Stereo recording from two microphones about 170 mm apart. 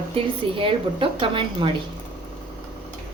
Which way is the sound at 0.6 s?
30° right (ahead or behind).